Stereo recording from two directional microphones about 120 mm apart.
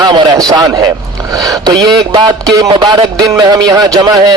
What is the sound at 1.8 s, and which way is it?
A man's voice, 35° right (ahead or behind).